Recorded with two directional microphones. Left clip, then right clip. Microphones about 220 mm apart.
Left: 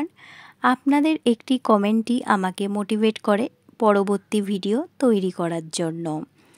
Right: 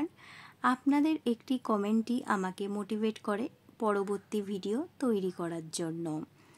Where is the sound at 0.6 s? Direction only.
30° left (ahead or behind).